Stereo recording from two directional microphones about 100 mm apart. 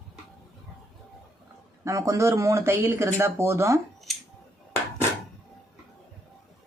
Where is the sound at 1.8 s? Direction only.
30° right (ahead or behind).